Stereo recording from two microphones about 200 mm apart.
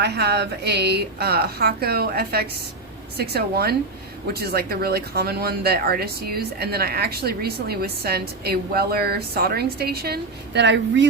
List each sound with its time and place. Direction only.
0.0 s speech: 55° right (ahead or behind)